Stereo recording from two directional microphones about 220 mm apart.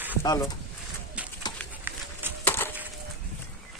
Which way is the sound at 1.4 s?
20° left (ahead or behind).